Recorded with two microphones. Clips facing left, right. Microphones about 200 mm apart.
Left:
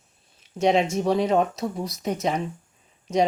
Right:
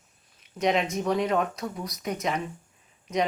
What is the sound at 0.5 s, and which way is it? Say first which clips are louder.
Speech: left 4 dB; 30° left (ahead or behind).